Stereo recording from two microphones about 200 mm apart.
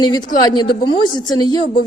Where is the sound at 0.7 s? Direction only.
55° left (ahead or behind).